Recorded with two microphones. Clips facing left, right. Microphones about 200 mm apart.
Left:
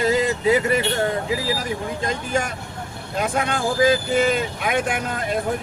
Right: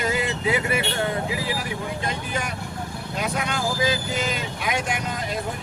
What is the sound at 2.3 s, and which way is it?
Speech, 45° left (ahead or behind).